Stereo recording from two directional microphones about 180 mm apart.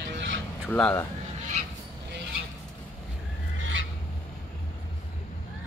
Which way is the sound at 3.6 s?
90° right.